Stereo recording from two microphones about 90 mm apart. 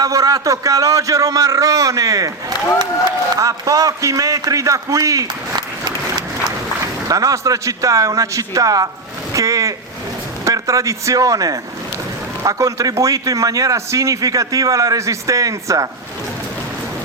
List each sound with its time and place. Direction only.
0.0 s a man's voice: 40° right (ahead or behind)
3.3 s a man's voice: 40° right (ahead or behind)
7.1 s a man's voice: 40° right (ahead or behind)